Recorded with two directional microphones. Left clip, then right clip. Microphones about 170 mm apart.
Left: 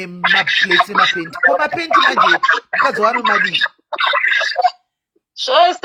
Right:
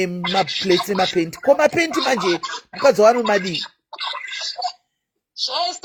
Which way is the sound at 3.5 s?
25° left (ahead or behind).